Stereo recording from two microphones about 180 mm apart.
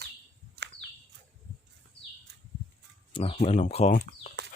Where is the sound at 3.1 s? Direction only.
30° left (ahead or behind).